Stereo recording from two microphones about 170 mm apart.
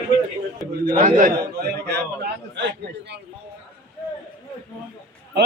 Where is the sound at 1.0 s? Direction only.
55° right (ahead or behind).